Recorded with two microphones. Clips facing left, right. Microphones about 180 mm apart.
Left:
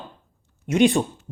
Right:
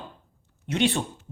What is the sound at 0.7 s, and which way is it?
Speech, 15° left (ahead or behind).